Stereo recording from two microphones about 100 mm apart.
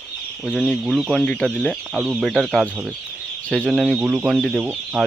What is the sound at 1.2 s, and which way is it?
Speech, 10° left (ahead or behind).